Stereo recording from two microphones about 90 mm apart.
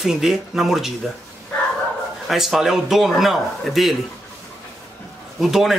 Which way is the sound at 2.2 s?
Centre (ahead or behind).